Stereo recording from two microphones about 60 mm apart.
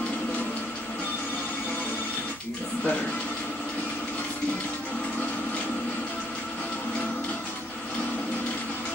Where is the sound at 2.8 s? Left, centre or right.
Left.